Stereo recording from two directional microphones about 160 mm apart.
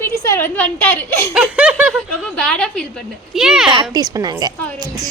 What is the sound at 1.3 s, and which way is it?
Snicker, 5° right (ahead or behind).